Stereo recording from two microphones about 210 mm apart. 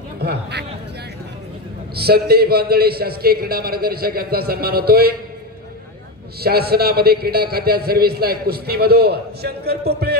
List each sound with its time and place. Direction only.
0.2 s a man's voice: 50° right (ahead or behind)
2.0 s a man's voice: 50° right (ahead or behind)
6.4 s a man's voice: 45° right (ahead or behind)